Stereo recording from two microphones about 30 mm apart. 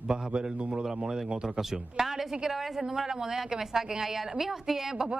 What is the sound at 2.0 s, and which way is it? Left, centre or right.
A woman's voice, centre.